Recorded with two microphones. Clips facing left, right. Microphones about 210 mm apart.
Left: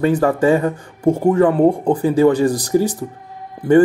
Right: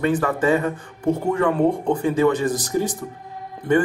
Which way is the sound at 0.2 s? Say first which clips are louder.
Left 5 dB; 30° left (ahead or behind).